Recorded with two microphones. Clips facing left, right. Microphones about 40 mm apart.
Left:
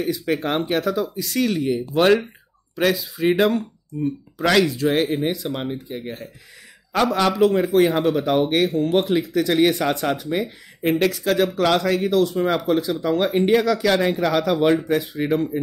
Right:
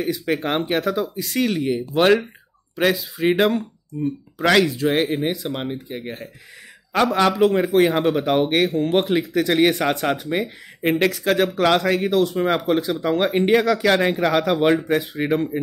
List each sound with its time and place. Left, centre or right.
0.0 s speech: centre
4.4 s speech: right
5.9 s speech: right
8.5 s speech: centre
8.7 s speech: right
9.8 s speech: centre
10.0 s speech: right